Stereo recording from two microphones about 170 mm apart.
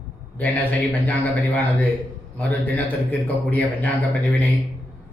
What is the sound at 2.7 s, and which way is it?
Speech, 10° left (ahead or behind).